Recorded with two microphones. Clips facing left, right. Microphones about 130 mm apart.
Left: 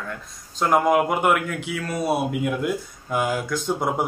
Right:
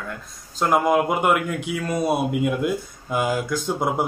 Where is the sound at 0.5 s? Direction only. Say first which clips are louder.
Even; 5° right (ahead or behind).